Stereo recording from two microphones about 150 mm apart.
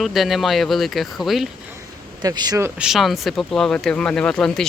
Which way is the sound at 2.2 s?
25° right (ahead or behind).